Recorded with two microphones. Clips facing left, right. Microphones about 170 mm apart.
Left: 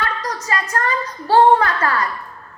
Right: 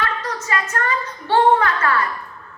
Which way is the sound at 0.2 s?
35° left (ahead or behind).